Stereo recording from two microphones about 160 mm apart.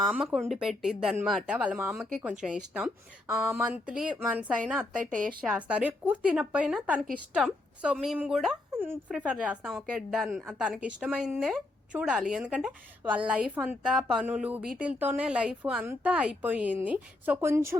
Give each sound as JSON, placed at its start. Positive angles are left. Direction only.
{"t": 0.0, "sound": "a woman's voice", "side_deg": 0}
{"t": 5.0, "sound": "a woman's voice", "side_deg": -55}
{"t": 5.5, "sound": "a woman's voice", "side_deg": -10}